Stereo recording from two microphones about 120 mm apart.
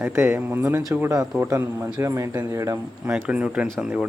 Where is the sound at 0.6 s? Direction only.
30° right (ahead or behind).